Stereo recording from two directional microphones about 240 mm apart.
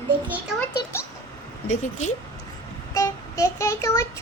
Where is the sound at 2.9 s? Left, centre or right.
Centre.